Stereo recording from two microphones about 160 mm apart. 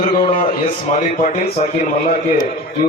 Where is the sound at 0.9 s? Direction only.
50° left (ahead or behind).